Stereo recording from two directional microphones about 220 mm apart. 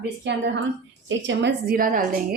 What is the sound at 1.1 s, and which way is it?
A woman's voice, 55° right (ahead or behind).